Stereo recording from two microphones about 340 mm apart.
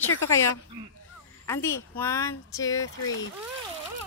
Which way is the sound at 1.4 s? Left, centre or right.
Centre.